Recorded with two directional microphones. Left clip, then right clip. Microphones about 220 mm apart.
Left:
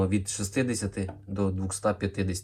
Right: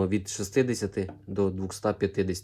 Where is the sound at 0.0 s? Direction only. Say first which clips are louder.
Even; 40° right (ahead or behind).